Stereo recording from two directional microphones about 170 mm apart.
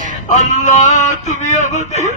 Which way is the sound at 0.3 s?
45° left (ahead or behind).